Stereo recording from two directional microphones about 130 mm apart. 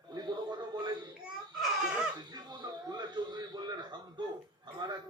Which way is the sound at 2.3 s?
30° right (ahead or behind).